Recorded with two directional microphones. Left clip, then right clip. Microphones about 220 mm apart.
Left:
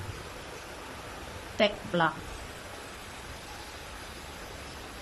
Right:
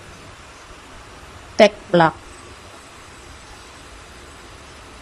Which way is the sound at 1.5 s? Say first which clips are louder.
Right 13 dB; 25° right (ahead or behind).